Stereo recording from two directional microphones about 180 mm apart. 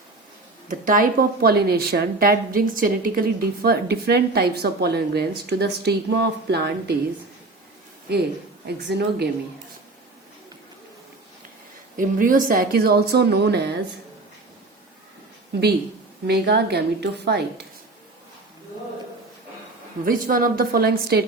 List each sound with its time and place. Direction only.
0.7 s a woman's voice: 50° right (ahead or behind); by 6.9 s 65° right (ahead or behind)
8.6 s a woman's voice: 65° right (ahead or behind)
11.9 s a woman's voice: 50° right (ahead or behind); by 13.7 s 65° right (ahead or behind)
16.2 s a woman's voice: 65° right (ahead or behind)
20.1 s a woman's voice: 50° right (ahead or behind)